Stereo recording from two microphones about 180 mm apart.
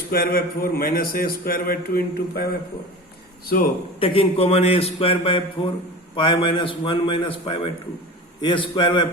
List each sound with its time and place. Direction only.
0.1 s a man's voice: 55° left (ahead or behind)
3.5 s speech: 50° left (ahead or behind)
4.0 s a man's voice: 30° left (ahead or behind)